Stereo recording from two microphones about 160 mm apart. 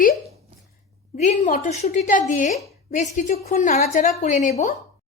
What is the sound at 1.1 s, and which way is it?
A woman's voice, 50° left (ahead or behind).